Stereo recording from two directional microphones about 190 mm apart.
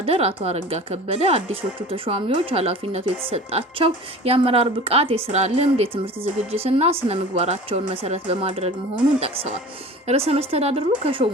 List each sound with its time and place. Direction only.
0.0 s speech: 30° right (ahead or behind)